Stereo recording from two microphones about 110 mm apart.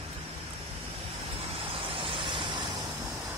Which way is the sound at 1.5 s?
55° right (ahead or behind).